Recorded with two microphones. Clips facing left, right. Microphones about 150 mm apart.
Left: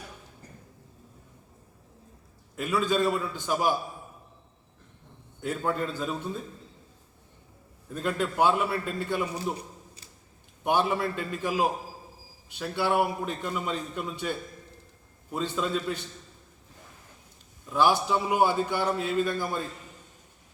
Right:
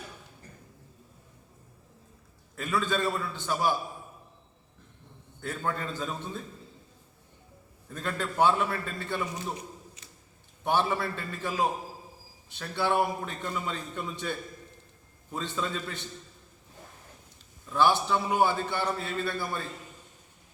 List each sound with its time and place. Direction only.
2.6 s a man's voice: 10° left (ahead or behind)
5.4 s a man's voice: 10° left (ahead or behind)
7.9 s a man's voice: 10° left (ahead or behind)
9.6 s a sound: 35° left (ahead or behind)
10.6 s a man's voice: 15° left (ahead or behind)
17.7 s a man's voice: 10° left (ahead or behind)